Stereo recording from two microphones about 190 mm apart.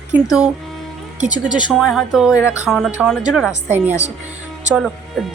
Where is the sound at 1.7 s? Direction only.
Centre (ahead or behind).